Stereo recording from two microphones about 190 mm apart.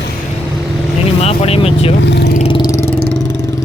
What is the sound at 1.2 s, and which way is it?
Speech, 30° left (ahead or behind).